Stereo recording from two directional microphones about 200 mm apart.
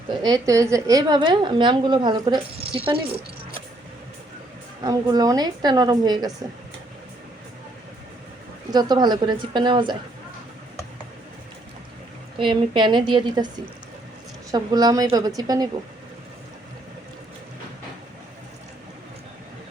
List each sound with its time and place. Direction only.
0.1 s a woman's voice: 20° right (ahead or behind)
4.8 s a woman's voice: 20° right (ahead or behind)
8.7 s a woman's voice: 20° right (ahead or behind)
12.4 s a woman's voice: 25° right (ahead or behind)
14.5 s a woman's voice: 20° right (ahead or behind)